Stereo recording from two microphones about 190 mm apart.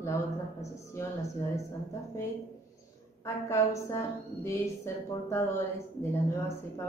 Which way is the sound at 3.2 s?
15° left (ahead or behind).